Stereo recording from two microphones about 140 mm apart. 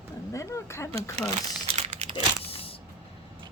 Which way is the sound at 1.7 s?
50° right (ahead or behind).